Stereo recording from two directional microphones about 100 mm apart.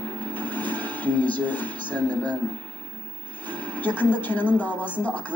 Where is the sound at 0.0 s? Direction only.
15° left (ahead or behind).